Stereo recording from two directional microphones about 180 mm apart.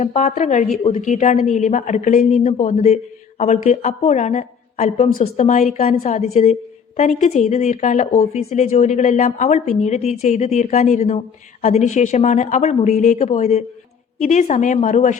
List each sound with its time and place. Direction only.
0.0 s a woman's voice: 40° left (ahead or behind)